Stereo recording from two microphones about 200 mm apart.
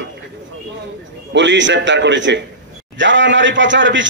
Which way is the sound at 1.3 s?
65° right (ahead or behind).